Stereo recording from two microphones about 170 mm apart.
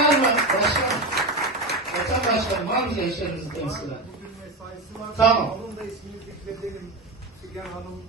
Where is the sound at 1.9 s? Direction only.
Centre (ahead or behind).